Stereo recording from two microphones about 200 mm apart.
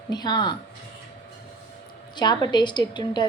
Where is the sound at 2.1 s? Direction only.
20° left (ahead or behind).